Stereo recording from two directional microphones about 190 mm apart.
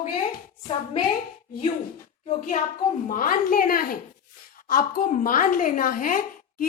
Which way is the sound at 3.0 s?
45° left (ahead or behind).